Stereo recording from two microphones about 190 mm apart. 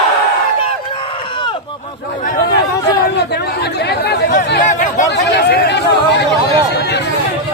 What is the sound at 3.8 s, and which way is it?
Chatter, 60° left (ahead or behind).